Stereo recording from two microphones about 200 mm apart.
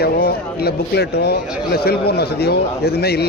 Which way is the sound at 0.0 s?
50° left (ahead or behind).